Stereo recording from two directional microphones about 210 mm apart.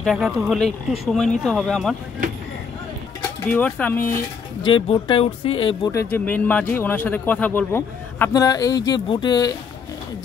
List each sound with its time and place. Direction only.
0.0 s speech: centre (ahead or behind)
3.4 s speech: 5° left (ahead or behind)
4.6 s speech: 25° left (ahead or behind)
5.9 s speech: 10° left (ahead or behind)